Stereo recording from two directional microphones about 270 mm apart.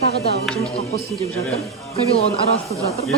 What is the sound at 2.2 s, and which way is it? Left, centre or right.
Speech, left.